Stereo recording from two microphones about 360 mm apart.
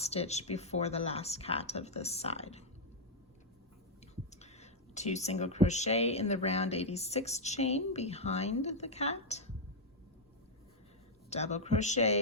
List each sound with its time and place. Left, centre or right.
0.0 s speech: centre
4.1 s speech: centre
11.3 s speech: centre